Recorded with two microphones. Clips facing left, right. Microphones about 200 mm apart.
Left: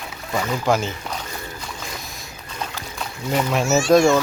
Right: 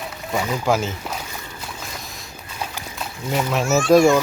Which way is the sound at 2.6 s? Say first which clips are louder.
Even; centre (ahead or behind).